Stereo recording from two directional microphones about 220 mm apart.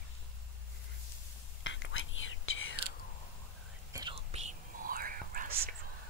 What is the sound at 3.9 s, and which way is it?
Whispering, 25° right (ahead or behind).